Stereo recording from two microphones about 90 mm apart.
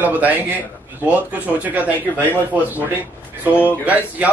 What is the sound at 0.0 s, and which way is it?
Speech, 20° right (ahead or behind).